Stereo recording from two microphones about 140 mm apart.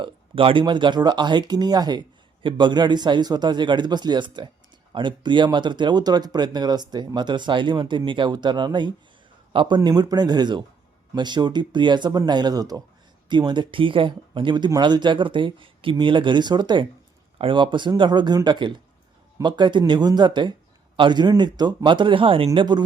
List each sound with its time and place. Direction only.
0.0 s speech: 40° right (ahead or behind)